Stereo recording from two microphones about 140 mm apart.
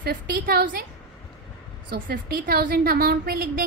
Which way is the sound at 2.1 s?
90° right.